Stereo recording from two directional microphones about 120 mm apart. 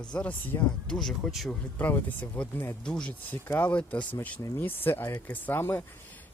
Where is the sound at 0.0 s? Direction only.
10° left (ahead or behind).